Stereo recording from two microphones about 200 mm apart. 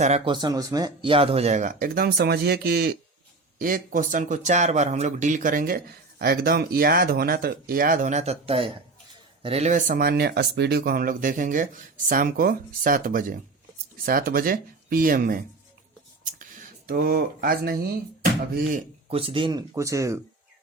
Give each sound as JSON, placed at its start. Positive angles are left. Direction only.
{"t": 0.3, "sound": "speech", "side_deg": -20}
{"t": 16.2, "sound": "a sound", "side_deg": -45}
{"t": 19.0, "sound": "speech", "side_deg": -25}